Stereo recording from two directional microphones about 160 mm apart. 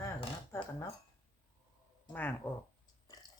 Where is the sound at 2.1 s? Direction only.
10° left (ahead or behind).